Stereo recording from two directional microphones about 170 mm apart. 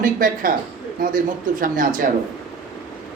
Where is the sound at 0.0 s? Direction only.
55° right (ahead or behind).